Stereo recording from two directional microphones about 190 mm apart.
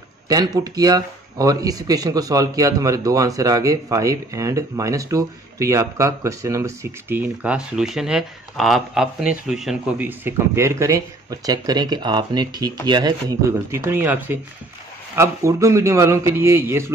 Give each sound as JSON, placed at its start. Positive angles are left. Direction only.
{"t": 0.3, "sound": "speech", "side_deg": -20}